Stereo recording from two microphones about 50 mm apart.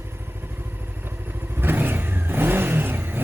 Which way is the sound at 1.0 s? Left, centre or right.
Right.